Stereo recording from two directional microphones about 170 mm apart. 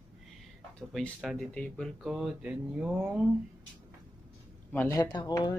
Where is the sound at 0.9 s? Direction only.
Centre (ahead or behind).